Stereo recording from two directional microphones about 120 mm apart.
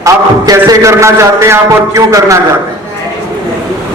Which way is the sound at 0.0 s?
30° right (ahead or behind).